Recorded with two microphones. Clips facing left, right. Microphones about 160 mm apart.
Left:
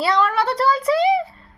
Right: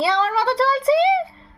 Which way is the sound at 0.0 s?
30° right (ahead or behind).